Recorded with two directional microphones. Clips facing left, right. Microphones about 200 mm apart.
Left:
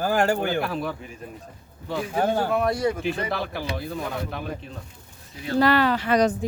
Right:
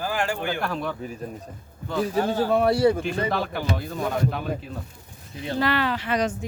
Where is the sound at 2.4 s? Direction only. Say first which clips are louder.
Right 4 dB; 30° right (ahead or behind).